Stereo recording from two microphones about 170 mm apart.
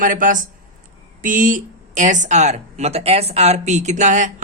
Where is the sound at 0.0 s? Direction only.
50° right (ahead or behind).